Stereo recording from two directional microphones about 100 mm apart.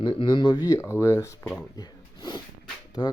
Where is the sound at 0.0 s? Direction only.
55° left (ahead or behind).